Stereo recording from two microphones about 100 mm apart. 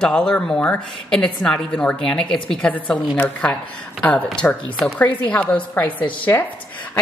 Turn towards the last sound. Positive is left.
turn(degrees=20)  # may be behind; listen again after turning